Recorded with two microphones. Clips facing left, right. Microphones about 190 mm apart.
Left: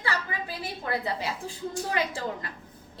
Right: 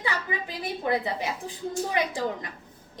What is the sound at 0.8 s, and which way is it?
A woman's voice, 20° right (ahead or behind).